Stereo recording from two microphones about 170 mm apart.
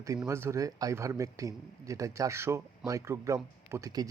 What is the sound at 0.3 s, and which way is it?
Speech, 15° right (ahead or behind).